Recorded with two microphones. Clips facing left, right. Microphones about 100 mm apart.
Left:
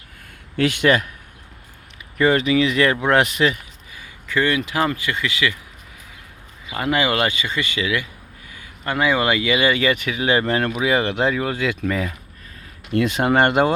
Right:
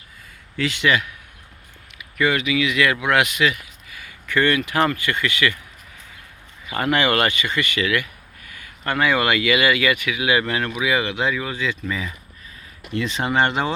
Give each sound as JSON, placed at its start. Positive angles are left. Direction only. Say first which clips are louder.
{"t": 0.5, "sound": "speech", "louder": "left 3 dB", "side_deg": 55}
{"t": 2.0, "sound": "speech", "louder": "left 4 dB", "side_deg": 35}
{"t": 4.4, "sound": "speech", "louder": "right 1 dB", "side_deg": 10}
{"t": 6.7, "sound": "speech", "louder": "even", "side_deg": 10}